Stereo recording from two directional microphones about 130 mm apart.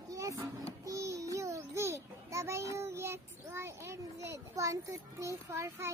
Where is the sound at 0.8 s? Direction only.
25° right (ahead or behind).